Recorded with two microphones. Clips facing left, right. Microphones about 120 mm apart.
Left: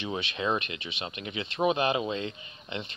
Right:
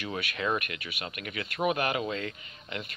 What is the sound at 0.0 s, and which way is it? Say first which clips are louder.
Speech: left 1 dB; 25° left (ahead or behind).